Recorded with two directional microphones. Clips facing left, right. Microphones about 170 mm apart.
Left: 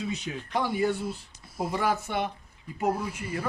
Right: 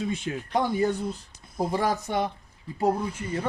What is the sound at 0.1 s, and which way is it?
Speech, 50° right (ahead or behind).